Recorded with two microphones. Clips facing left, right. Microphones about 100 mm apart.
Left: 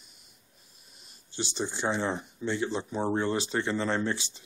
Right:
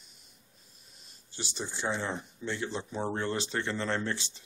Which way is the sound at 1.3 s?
30° left (ahead or behind).